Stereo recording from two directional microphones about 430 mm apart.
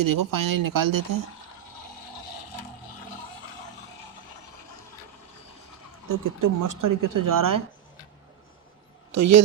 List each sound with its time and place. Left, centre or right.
0.0 s speech: right
6.1 s speech: right
9.1 s a man's voice: right